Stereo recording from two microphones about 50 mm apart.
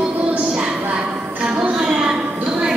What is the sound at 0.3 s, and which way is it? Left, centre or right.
Music, right.